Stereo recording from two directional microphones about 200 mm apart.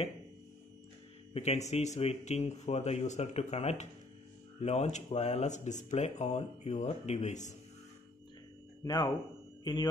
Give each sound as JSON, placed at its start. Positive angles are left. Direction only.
{"t": 1.3, "sound": "speech", "side_deg": 35}
{"t": 8.8, "sound": "speech", "side_deg": 20}